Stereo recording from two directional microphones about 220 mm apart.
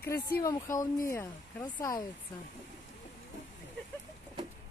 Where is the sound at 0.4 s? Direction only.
15° left (ahead or behind).